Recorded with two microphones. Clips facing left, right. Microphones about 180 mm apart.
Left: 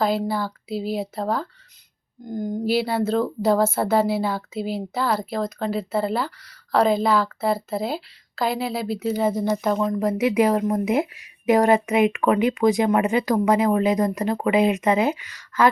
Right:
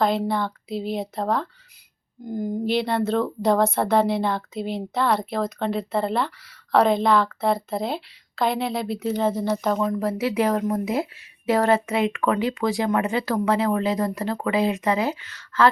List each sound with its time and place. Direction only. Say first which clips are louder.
0.0 s speech: even; 5° left (ahead or behind)
2.6 s speech: left 1 dB; 5° left (ahead or behind)
10.1 s a woman's voice: left 5 dB; 15° left (ahead or behind)